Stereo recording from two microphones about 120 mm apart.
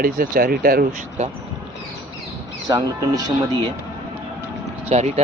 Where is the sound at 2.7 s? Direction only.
30° right (ahead or behind).